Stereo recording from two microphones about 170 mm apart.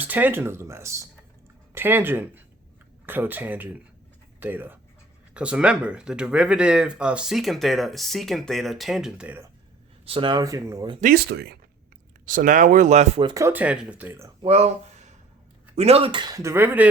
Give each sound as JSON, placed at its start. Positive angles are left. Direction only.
{"t": 0.0, "sound": "speech", "side_deg": -10}
{"t": 10.1, "sound": "speech", "side_deg": -30}
{"t": 11.0, "sound": "speech", "side_deg": -70}
{"t": 12.2, "sound": "speech", "side_deg": -50}
{"t": 13.2, "sound": "speech", "side_deg": -20}
{"t": 14.4, "sound": "speech", "side_deg": -35}